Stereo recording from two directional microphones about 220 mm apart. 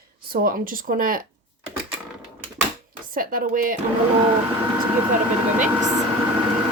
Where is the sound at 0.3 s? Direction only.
40° right (ahead or behind).